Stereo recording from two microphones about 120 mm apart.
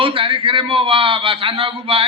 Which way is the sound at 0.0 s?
45° right (ahead or behind).